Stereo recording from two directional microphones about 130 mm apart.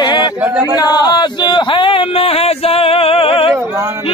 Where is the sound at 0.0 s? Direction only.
35° left (ahead or behind).